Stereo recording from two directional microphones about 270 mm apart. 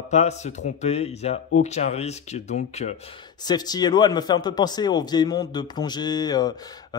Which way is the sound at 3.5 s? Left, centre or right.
Centre.